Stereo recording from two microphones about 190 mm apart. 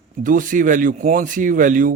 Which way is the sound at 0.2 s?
45° right (ahead or behind).